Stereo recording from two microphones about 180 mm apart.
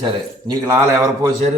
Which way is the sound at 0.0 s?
25° right (ahead or behind).